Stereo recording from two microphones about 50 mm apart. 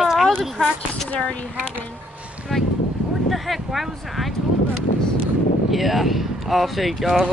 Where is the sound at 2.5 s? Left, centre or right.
Centre.